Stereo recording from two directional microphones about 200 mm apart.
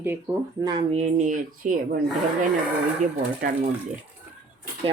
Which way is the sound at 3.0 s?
40° right (ahead or behind).